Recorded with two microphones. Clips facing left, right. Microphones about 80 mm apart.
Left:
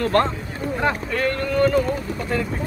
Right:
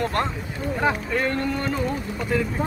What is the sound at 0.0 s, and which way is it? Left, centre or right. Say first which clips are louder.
Speech: left 5 dB; centre.